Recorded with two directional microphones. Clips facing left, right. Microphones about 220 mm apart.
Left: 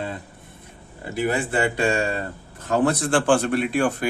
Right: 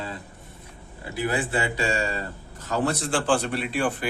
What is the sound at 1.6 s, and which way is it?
A man's voice, 55° left (ahead or behind).